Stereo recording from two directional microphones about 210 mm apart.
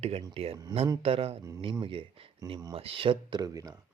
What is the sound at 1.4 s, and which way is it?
Speech, 15° right (ahead or behind).